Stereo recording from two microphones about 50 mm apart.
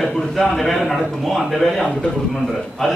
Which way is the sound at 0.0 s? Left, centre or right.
Centre.